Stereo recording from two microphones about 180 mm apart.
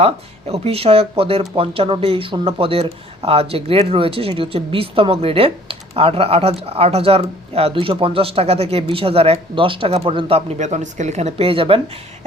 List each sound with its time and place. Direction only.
0.0 s speech: 35° right (ahead or behind)